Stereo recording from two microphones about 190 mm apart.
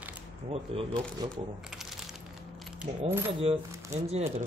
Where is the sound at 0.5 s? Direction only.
25° right (ahead or behind).